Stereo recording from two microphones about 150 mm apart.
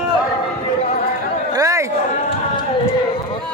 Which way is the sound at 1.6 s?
20° right (ahead or behind).